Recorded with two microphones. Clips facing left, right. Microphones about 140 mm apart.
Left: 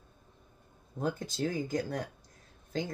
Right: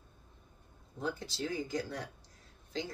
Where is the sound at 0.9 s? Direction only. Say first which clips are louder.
Left 4 dB; 45° left (ahead or behind).